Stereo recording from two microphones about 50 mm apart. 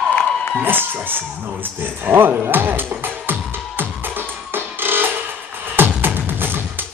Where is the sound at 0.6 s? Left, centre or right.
Right.